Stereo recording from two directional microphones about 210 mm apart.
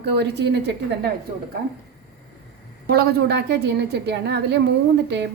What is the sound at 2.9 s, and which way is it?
A woman's voice, 50° right (ahead or behind).